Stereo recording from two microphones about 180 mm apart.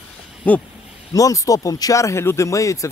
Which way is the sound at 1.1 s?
20° left (ahead or behind).